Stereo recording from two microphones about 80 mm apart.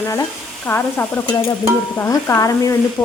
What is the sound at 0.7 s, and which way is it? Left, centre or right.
Stir, left.